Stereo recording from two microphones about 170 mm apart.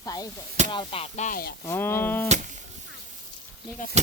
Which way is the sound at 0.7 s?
30° left (ahead or behind).